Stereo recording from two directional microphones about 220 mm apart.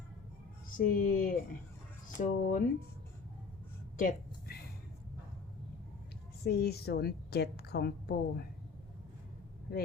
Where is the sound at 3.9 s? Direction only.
40° left (ahead or behind).